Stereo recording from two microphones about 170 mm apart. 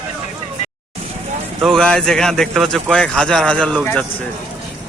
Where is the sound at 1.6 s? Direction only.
5° left (ahead or behind).